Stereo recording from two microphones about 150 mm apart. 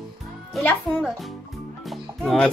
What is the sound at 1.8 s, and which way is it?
Music, centre (ahead or behind).